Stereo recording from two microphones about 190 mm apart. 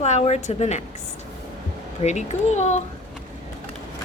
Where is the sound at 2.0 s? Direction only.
35° left (ahead or behind).